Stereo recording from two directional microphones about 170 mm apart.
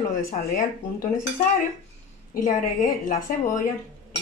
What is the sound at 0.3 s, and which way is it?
Speech, 50° left (ahead or behind).